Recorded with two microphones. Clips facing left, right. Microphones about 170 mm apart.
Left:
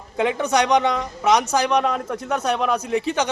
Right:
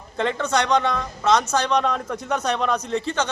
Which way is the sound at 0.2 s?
10° left (ahead or behind).